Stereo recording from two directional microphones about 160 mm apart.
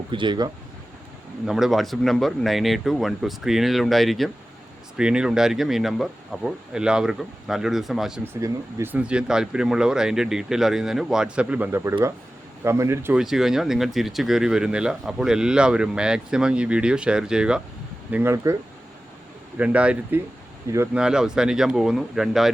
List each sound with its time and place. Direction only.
0.1 s speech: 30° right (ahead or behind)
1.5 s speech: centre (ahead or behind)
8.2 s speech: 15° right (ahead or behind)
13.1 s speech: centre (ahead or behind)
18.1 s speech: 15° right (ahead or behind)
19.5 s speech: 10° right (ahead or behind)
20.9 s speech: 5° right (ahead or behind)